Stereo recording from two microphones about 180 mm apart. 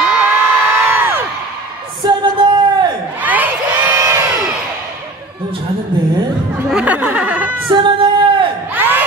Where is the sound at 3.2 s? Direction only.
10° right (ahead or behind).